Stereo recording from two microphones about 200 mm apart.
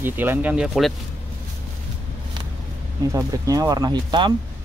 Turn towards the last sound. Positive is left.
turn(degrees=-20)  # may be behind; listen again after turning